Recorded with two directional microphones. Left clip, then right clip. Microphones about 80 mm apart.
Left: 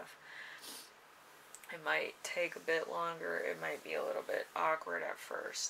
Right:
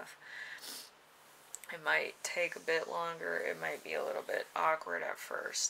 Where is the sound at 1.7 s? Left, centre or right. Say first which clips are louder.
Right 3 dB; right.